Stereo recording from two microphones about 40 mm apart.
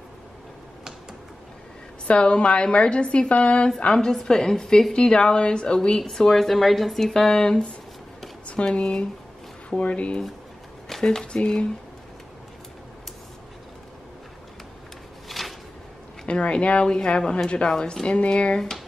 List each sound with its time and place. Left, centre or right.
2.0 s a woman's voice: left
4.1 s a woman's voice: centre
5.9 s speech: centre
7.3 s a woman's voice: centre
8.7 s a woman's voice: left
10.9 s speech: centre
15.2 s a sound: centre
16.3 s a woman's voice: left
18.0 s a woman's voice: left